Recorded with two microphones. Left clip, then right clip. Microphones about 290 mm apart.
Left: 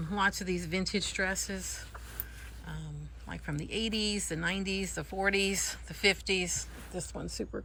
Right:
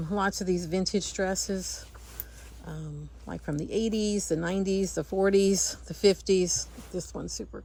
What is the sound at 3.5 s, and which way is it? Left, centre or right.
Speech, centre.